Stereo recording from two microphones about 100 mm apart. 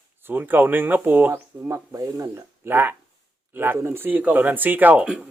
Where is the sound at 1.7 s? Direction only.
35° right (ahead or behind).